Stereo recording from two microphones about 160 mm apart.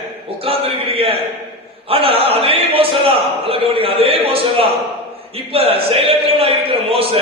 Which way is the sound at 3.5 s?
35° right (ahead or behind).